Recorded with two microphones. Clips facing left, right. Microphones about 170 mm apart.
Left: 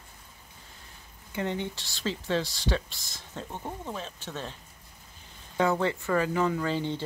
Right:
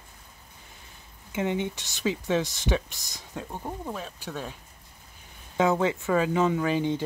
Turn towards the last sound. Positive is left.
turn(degrees=-15)  # may be behind; listen again after turning